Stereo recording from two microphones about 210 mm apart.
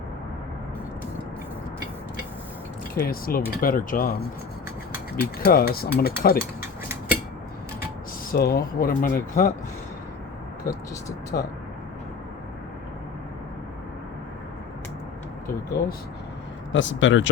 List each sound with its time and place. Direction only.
2.9 s speech: 45° left (ahead or behind)
5.1 s speech: 45° left (ahead or behind)
8.3 s speech: 50° left (ahead or behind)
10.7 s speech: 45° left (ahead or behind)
16.7 s speech: 65° left (ahead or behind)